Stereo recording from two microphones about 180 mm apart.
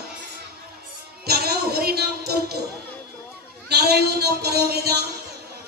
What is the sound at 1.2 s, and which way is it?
Music, 60° right (ahead or behind).